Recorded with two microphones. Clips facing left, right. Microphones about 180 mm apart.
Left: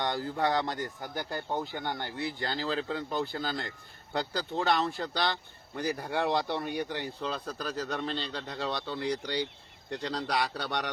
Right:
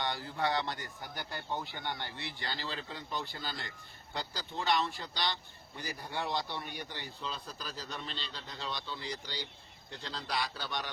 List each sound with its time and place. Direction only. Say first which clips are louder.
0.0 s a man's voice: left 5 dB; 45° left (ahead or behind); by 10.8 s 70° left (ahead or behind)